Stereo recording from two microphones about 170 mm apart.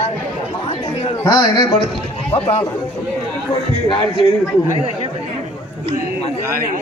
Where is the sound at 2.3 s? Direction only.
40° left (ahead or behind).